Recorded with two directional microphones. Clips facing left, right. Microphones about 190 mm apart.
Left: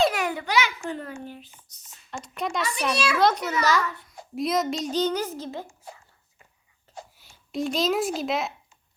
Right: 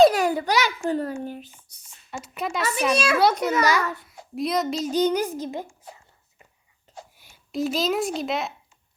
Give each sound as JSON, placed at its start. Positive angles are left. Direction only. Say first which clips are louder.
{"t": 0.0, "sound": "a child's voice", "louder": "right 7 dB", "side_deg": -35}
{"t": 1.7, "sound": "a sound", "louder": "right 1 dB", "side_deg": -10}
{"t": 2.9, "sound": "a child's voice", "louder": "right 4 dB", "side_deg": -50}
{"t": 3.6, "sound": "speech", "louder": "even", "side_deg": -10}
{"t": 4.4, "sound": "a child's voice", "louder": "right 1 dB", "side_deg": 0}
{"t": 4.9, "sound": "speech", "louder": "right 5 dB", "side_deg": -15}
{"t": 7.5, "sound": "a child's voice", "louder": "right 1 dB", "side_deg": 0}